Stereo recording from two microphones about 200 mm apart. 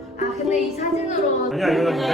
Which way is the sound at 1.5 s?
Centre (ahead or behind).